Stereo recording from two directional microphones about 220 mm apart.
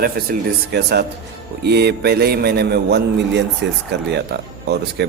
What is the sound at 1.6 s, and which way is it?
A man's voice, 50° right (ahead or behind).